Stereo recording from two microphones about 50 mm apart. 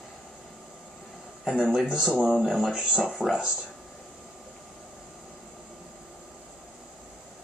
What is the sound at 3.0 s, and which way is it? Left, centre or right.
Speech, centre.